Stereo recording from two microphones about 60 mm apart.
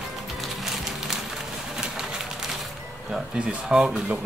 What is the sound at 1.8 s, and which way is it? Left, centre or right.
Pigeon, centre.